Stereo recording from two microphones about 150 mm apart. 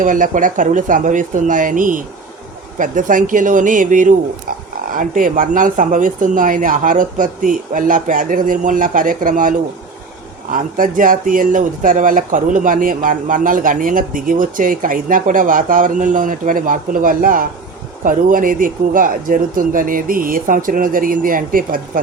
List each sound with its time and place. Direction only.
0.0 s speech: 60° right (ahead or behind)